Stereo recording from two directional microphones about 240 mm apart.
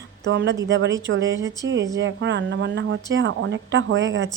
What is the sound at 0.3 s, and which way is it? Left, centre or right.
A woman's voice, right.